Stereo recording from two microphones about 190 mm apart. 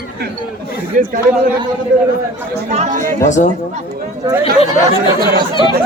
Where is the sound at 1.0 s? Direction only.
45° right (ahead or behind).